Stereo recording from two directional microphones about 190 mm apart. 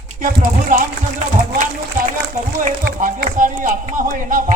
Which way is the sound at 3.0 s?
45° right (ahead or behind).